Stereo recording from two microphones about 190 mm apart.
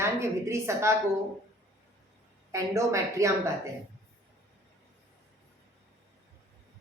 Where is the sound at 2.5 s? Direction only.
15° right (ahead or behind).